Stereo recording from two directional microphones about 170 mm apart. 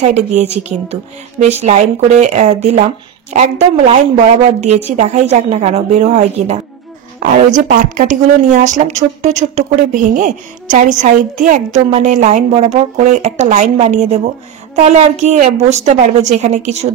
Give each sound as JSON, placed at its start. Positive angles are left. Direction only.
{"t": 0.0, "sound": "a woman's voice", "side_deg": -40}
{"t": 7.2, "sound": "a woman's voice", "side_deg": -50}